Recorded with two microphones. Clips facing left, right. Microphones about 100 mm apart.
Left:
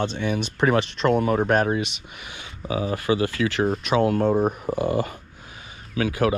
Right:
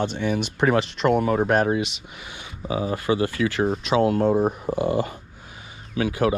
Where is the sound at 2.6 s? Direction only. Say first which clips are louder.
Even; 30° right (ahead or behind).